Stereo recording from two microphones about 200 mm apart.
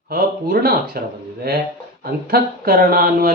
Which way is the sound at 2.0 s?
45° right (ahead or behind).